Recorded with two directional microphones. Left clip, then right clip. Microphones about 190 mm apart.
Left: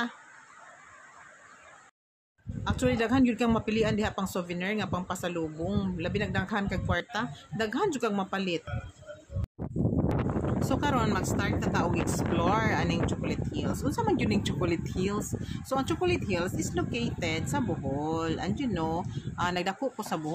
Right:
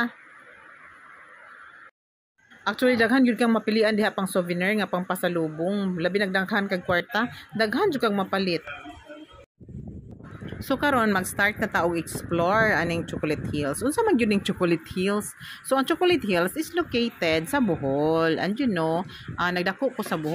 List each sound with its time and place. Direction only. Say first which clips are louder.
2.6 s speech: right 7 dB; 10° right (ahead or behind)
10.7 s speech: right 8 dB; 25° right (ahead or behind)
16.7 s speech: right 7 dB; 20° right (ahead or behind)